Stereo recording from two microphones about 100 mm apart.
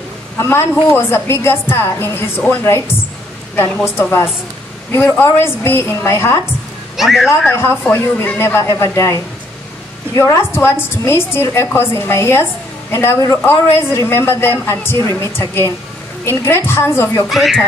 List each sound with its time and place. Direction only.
0.4 s a woman's voice: 25° left (ahead or behind)
7.0 s speech: centre (ahead or behind)
7.2 s a woman's voice: 25° left (ahead or behind)
10.1 s a woman's voice: 30° left (ahead or behind)
17.3 s speech: centre (ahead or behind)